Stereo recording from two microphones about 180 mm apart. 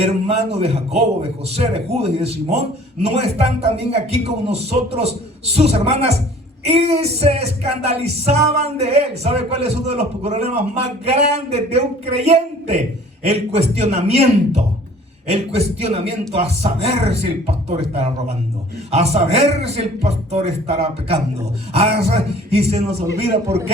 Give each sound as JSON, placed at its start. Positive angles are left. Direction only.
{"t": 0.0, "sound": "a man's voice", "side_deg": -35}